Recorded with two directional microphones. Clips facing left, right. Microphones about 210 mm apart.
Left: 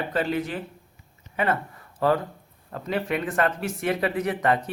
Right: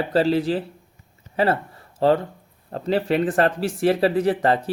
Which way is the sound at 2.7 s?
30° right (ahead or behind).